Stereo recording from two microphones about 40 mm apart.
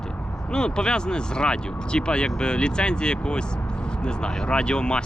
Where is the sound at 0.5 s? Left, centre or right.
Left.